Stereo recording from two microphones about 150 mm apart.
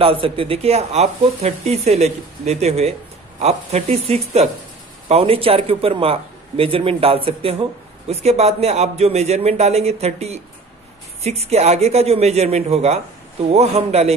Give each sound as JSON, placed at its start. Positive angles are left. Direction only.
{"t": 0.0, "sound": "a man's voice", "side_deg": -40}